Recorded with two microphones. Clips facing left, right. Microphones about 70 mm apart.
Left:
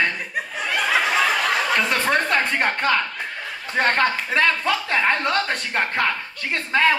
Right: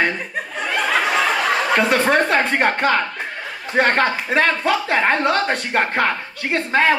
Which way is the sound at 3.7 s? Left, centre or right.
Centre.